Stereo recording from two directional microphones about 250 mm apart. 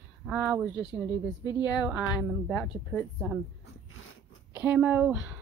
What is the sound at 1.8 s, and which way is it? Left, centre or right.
A woman's voice, centre.